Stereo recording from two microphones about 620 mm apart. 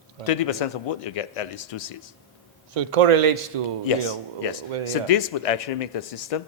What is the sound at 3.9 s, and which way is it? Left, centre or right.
A man's voice, left.